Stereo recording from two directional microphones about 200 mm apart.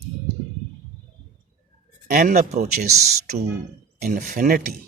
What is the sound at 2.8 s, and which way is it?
Speech, 50° right (ahead or behind).